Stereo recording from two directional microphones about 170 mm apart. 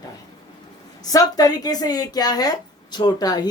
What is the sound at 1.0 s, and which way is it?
A woman's voice, 20° left (ahead or behind).